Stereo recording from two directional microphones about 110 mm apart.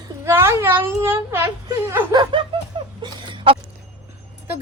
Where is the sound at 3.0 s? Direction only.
45° right (ahead or behind).